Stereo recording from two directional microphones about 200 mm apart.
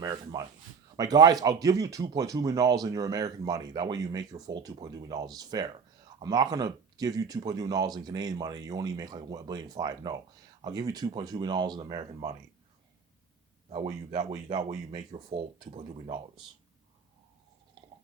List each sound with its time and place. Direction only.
0.0 s speech: 20° right (ahead or behind)
13.7 s speech: 25° right (ahead or behind)